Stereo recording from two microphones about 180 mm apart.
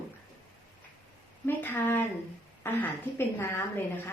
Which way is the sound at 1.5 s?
10° left (ahead or behind).